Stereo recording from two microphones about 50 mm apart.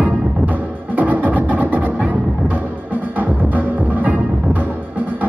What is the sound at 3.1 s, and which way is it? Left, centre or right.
Music, right.